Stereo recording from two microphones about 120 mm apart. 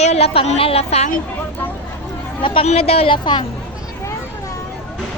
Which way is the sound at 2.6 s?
55° left (ahead or behind).